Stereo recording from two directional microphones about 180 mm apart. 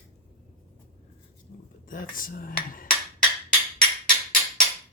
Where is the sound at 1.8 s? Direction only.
50° left (ahead or behind).